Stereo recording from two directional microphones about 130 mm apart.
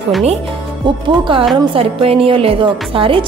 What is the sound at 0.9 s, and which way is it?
A woman's voice, 35° right (ahead or behind).